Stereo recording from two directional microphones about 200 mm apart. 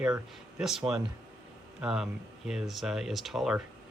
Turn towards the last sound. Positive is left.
turn(degrees=0)  # may be behind; listen again after turning